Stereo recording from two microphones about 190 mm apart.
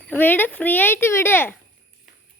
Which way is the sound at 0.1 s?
10° left (ahead or behind).